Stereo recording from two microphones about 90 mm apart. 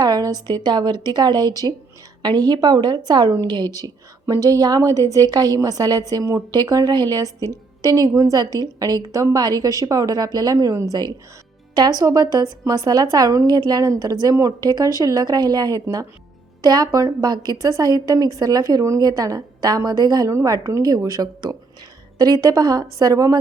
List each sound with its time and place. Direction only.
0.0 s a woman's voice: 45° right (ahead or behind)